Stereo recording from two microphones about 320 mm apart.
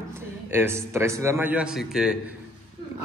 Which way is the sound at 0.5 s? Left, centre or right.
Centre.